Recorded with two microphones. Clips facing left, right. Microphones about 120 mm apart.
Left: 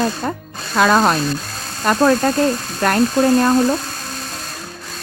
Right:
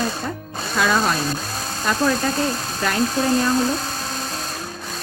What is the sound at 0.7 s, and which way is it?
Speech, 55° left (ahead or behind).